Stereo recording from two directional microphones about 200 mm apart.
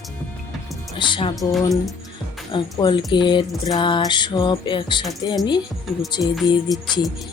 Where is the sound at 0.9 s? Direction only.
25° left (ahead or behind).